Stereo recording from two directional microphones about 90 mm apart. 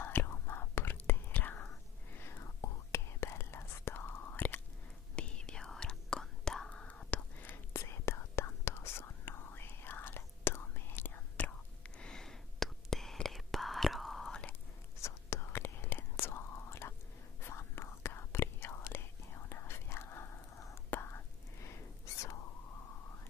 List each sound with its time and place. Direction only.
0.0 s whispering: 25° left (ahead or behind)
5.1 s whispering: 10° left (ahead or behind)
7.7 s whispering: 30° left (ahead or behind); by 14.4 s 5° left (ahead or behind)
15.0 s whispering: 30° left (ahead or behind)